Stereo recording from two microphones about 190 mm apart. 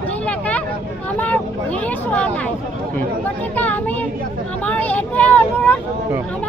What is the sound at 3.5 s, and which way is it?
Speech, 10° left (ahead or behind).